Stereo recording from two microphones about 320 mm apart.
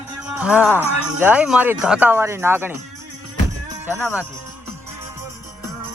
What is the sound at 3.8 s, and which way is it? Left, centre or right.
Speech, centre.